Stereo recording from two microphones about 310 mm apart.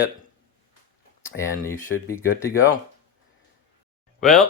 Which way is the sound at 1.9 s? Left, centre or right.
Left.